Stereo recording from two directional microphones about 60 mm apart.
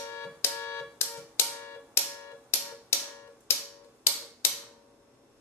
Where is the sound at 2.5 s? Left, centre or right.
Left.